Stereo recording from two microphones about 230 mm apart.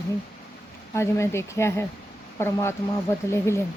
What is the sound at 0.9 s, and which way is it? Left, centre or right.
Speech, centre.